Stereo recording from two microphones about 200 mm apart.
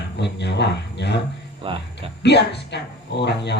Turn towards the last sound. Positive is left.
turn(degrees=60)  # may be behind; listen again after turning